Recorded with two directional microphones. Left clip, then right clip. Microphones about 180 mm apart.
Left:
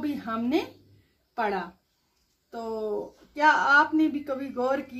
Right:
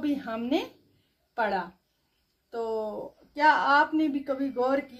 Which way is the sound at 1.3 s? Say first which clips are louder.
Even; 30° right (ahead or behind).